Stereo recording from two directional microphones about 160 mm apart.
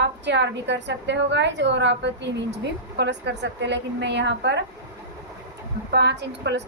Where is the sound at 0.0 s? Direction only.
90° right.